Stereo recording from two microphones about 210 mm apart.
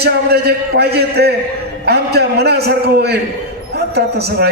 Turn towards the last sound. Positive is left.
turn(degrees=-50)  # may be behind; listen again after turning